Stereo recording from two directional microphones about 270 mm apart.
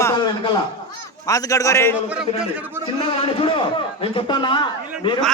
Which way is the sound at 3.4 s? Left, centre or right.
Centre.